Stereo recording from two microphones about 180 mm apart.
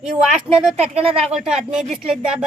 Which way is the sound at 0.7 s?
35° right (ahead or behind).